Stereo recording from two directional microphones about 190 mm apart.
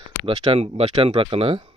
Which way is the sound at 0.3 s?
30° right (ahead or behind).